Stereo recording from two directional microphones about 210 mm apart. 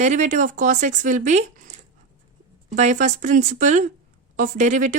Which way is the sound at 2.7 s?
35° right (ahead or behind).